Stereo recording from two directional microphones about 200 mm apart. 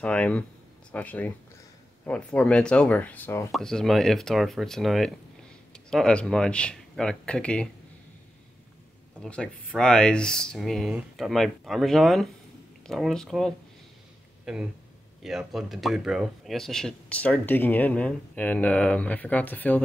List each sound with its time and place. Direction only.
0.0 s speech: 5° left (ahead or behind)
9.2 s speech: 5° left (ahead or behind)